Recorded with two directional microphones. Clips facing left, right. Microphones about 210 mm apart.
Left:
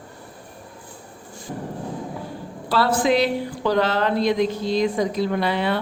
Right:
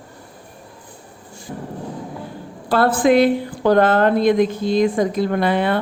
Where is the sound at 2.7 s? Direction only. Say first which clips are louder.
Right 5 dB; 50° right (ahead or behind).